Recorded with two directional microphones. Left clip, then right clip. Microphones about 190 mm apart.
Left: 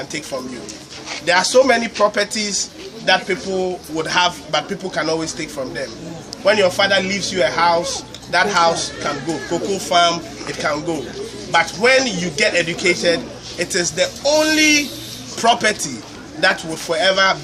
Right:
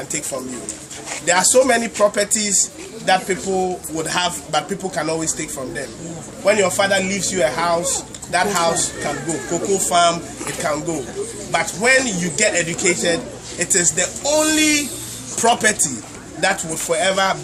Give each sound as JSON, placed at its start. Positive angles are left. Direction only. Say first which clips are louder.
{"t": 1.2, "sound": "a man's voice", "louder": "left 1 dB", "side_deg": -5}